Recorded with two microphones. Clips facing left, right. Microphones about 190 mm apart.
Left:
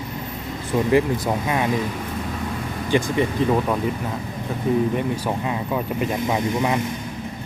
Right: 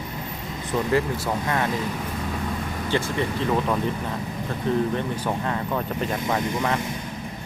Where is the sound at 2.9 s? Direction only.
15° left (ahead or behind).